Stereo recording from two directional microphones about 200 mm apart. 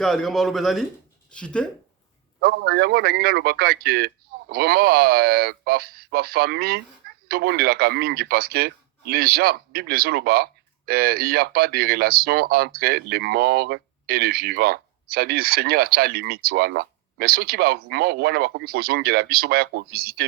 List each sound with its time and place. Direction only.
0.0 s a man's voice: centre (ahead or behind)
2.4 s speech: 55° right (ahead or behind)